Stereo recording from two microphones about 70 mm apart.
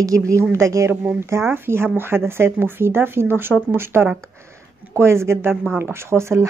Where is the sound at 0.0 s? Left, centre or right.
Right.